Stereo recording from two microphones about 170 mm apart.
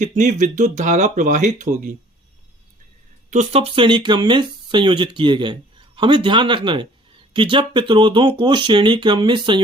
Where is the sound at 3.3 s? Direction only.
40° right (ahead or behind).